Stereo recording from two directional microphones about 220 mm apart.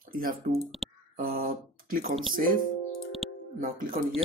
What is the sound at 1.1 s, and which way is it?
Speech, 40° right (ahead or behind).